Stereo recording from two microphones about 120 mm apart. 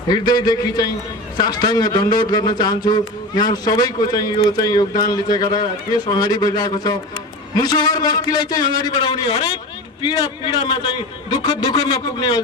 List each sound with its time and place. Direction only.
0.1 s a man's voice: 35° left (ahead or behind)